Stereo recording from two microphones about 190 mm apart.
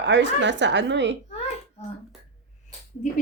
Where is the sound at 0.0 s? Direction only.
65° right (ahead or behind).